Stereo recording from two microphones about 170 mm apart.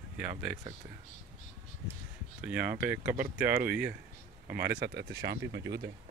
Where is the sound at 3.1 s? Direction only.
60° right (ahead or behind).